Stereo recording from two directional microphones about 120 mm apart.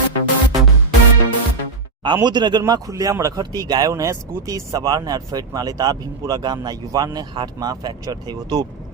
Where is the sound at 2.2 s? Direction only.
40° right (ahead or behind).